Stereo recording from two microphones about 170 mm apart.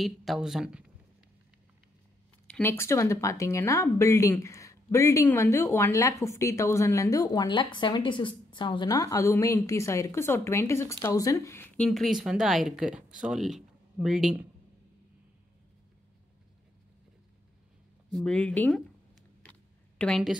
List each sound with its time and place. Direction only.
0.0 s speech: centre (ahead or behind)
2.4 s speech: 10° left (ahead or behind)
18.1 s speech: 5° left (ahead or behind)
20.0 s speech: centre (ahead or behind)